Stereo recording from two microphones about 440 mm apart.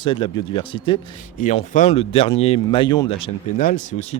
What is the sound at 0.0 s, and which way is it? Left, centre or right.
Speech, centre.